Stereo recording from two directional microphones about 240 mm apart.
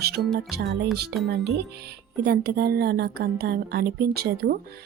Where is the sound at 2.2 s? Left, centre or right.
Right.